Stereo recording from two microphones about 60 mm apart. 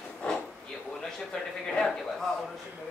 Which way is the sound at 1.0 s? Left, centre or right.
Centre.